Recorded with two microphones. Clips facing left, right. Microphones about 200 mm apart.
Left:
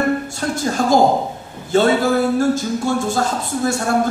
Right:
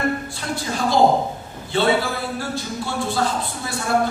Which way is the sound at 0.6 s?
45° left (ahead or behind).